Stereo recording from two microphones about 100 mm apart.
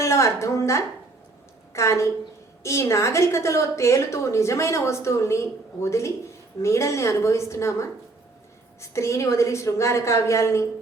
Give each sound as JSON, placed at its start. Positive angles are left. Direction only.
{"t": 0.0, "sound": "a woman's voice", "side_deg": 30}